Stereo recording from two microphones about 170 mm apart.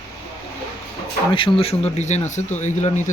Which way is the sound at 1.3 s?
35° left (ahead or behind).